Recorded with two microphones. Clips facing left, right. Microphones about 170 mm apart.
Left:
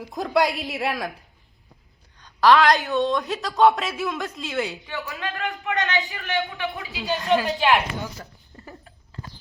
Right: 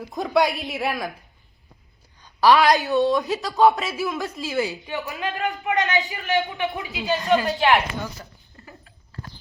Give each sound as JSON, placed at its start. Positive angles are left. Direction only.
{"t": 0.0, "sound": "speech", "side_deg": 0}
{"t": 2.1, "sound": "a sound", "side_deg": -10}
{"t": 2.9, "sound": "speech", "side_deg": -5}
{"t": 4.9, "sound": "a man's voice", "side_deg": -20}
{"t": 7.0, "sound": "speech", "side_deg": 0}